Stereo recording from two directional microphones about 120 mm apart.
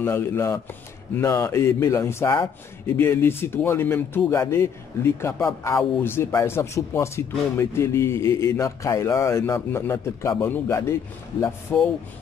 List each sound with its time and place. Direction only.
0.0 s a man's voice: 20° left (ahead or behind)